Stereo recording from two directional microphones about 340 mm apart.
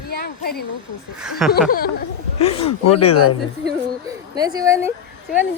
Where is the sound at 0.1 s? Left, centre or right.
Left.